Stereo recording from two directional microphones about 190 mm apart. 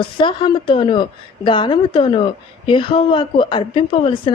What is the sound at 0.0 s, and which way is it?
Speech, 25° left (ahead or behind).